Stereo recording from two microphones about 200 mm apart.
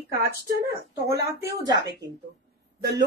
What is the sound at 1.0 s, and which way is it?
Speech, 15° right (ahead or behind).